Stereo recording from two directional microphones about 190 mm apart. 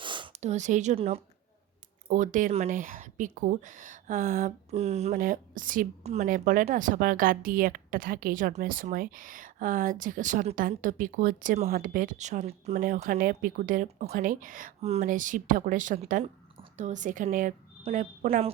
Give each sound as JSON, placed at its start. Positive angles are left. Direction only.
{"t": 0.0, "sound": "a woman's voice", "side_deg": -25}